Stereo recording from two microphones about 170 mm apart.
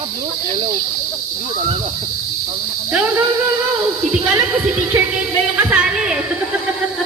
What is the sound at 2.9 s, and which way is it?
Cricket, 15° right (ahead or behind).